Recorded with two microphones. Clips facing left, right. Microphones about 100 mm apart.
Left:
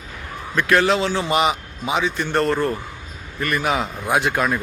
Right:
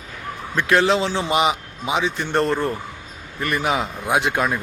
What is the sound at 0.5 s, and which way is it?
A man's voice, 20° right (ahead or behind).